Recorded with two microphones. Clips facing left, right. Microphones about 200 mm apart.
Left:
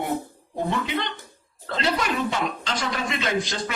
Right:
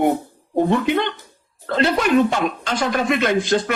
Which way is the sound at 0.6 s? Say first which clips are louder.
Right 9 dB; 55° right (ahead or behind).